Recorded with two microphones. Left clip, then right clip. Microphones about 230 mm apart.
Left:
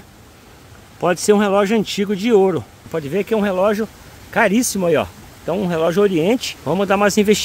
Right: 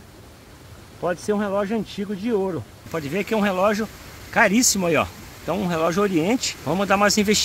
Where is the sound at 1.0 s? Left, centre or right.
Left.